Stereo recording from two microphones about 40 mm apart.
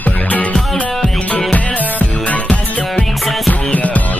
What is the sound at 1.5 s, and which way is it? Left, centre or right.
Music, left.